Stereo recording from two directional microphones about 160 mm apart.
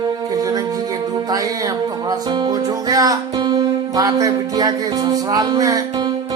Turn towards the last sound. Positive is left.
turn(degrees=-20)  # may be behind; listen again after turning